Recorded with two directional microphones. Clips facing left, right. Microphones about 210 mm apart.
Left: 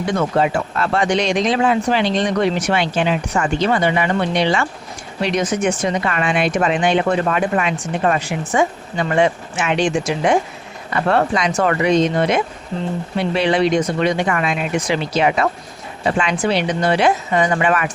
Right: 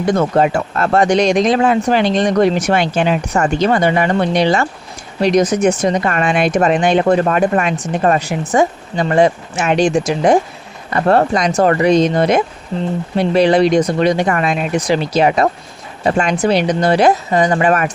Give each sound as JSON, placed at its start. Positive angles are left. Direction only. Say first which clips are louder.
{"t": 0.0, "sound": "a man's voice", "louder": "right 4 dB", "side_deg": -45}